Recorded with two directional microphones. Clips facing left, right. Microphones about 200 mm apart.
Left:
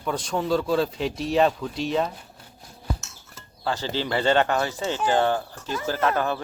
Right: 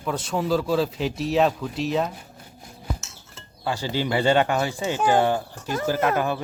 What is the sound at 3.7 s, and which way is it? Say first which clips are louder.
Speech: right 1 dB; 15° right (ahead or behind).